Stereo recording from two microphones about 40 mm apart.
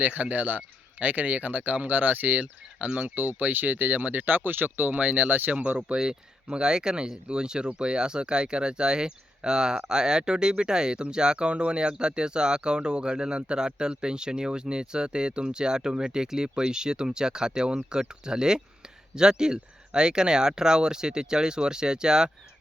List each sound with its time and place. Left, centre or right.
0.0 s speech: right
2.7 s speech: right
3.2 s speech: right
4.9 s speech: right
5.7 s speech: centre